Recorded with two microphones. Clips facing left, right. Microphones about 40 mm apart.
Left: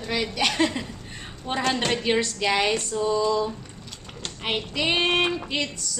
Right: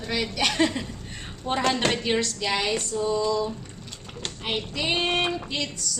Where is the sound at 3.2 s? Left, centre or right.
Left.